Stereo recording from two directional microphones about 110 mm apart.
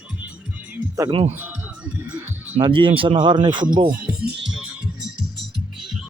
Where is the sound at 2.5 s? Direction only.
55° right (ahead or behind).